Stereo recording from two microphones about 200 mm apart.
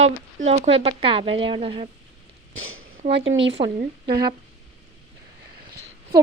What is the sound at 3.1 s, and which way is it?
Speech, 60° right (ahead or behind).